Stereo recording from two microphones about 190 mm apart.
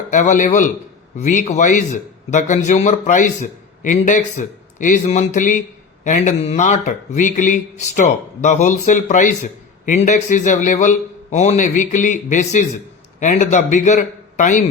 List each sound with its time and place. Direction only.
0.1 s a man's voice: 40° left (ahead or behind)